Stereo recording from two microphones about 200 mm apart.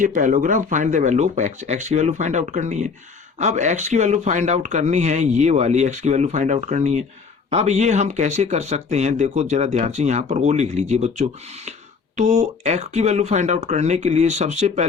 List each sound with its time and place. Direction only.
0.0 s speech: 40° right (ahead or behind)